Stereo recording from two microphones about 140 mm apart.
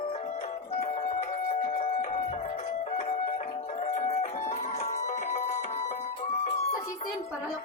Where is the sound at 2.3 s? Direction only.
50° left (ahead or behind).